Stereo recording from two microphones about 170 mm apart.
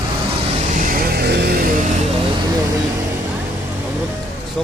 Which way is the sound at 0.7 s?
60° right (ahead or behind).